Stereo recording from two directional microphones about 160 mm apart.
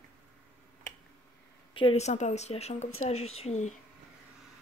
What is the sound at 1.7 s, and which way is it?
A woman's voice, 35° left (ahead or behind).